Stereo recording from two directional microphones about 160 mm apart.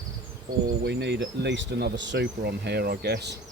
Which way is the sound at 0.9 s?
90° right.